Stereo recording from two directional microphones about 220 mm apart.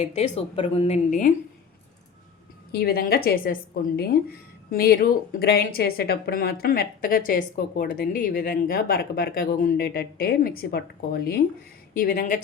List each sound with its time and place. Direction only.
0.0 s speech: 30° left (ahead or behind)
2.7 s speech: 45° left (ahead or behind)